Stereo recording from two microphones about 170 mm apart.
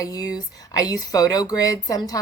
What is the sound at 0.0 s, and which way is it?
Speech, 20° left (ahead or behind).